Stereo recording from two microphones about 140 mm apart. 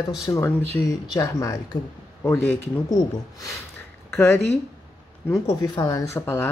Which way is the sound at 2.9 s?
25° left (ahead or behind).